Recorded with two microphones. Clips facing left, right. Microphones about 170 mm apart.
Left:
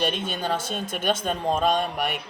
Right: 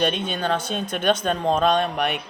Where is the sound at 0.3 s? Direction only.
10° left (ahead or behind).